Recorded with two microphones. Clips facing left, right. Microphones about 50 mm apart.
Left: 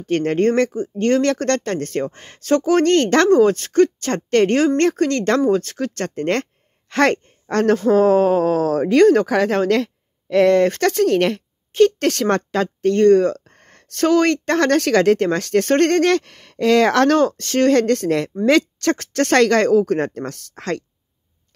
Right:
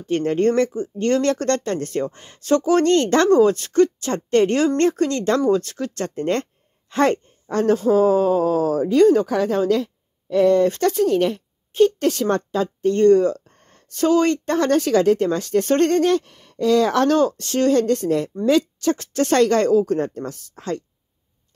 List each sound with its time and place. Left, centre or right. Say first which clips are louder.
0.0 s speech: left 1 dB; left
7.7 s speech: left 1 dB; left
8.0 s a woman's voice: left 2 dB; left
12.9 s speech: left 1 dB; left
17.1 s speech: left 2 dB; left